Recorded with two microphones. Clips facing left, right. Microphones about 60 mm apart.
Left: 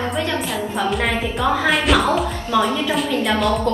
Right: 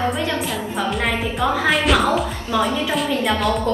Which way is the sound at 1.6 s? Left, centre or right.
Centre.